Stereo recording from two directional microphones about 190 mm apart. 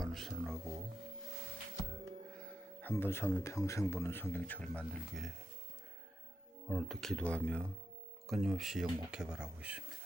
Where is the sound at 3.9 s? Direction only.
10° left (ahead or behind).